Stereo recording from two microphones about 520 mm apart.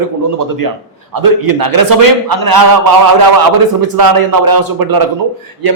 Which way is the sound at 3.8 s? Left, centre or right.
Right.